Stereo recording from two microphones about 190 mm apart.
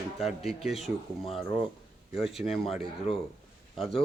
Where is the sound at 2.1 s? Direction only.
Centre (ahead or behind).